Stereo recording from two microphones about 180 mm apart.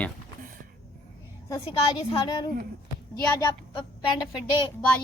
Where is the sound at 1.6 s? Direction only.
30° left (ahead or behind).